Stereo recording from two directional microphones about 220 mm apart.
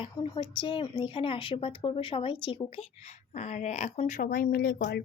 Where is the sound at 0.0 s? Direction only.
20° left (ahead or behind).